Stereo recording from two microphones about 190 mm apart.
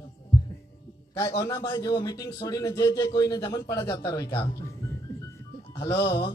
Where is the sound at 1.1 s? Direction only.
20° left (ahead or behind).